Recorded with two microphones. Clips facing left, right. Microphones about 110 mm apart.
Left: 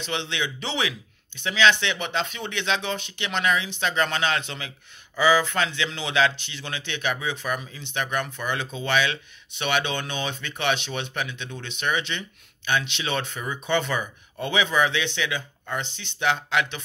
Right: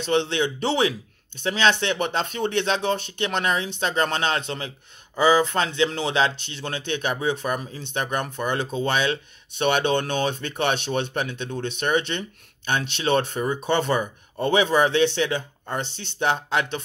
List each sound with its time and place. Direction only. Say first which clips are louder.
0.1 s speech: right 8 dB; 45° right (ahead or behind)
5.9 s speech: right 5 dB; 50° right (ahead or behind)
6.1 s speech: even; 35° right (ahead or behind)